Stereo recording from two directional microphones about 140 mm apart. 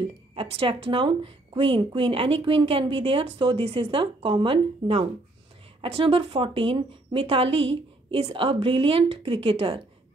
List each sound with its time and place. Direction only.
0.3 s a woman's voice: 40° right (ahead or behind)